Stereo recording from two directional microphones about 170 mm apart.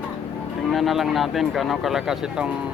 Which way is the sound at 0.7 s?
Centre (ahead or behind).